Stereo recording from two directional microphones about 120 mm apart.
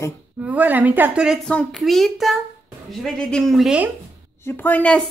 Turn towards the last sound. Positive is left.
turn(degrees=15)  # may be behind; listen again after turning